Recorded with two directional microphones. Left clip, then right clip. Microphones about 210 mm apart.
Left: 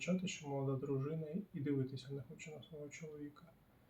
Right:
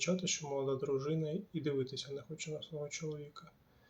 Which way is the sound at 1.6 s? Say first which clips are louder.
Right 4 dB; 30° right (ahead or behind).